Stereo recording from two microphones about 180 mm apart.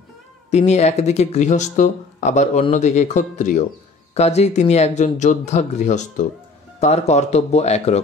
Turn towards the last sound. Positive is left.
turn(degrees=35)  # may be behind; listen again after turning